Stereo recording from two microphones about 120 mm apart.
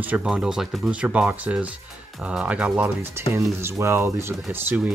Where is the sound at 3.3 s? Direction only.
25° right (ahead or behind).